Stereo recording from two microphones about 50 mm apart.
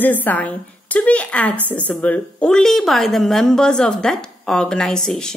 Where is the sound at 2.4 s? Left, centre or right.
Centre.